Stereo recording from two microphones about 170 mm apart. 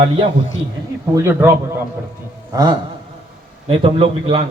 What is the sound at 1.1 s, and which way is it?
A man's voice, 15° right (ahead or behind).